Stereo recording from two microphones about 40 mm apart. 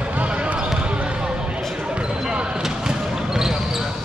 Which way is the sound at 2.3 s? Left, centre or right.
Right.